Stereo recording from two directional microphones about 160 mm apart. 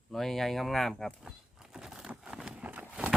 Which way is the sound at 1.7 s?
5° right (ahead or behind).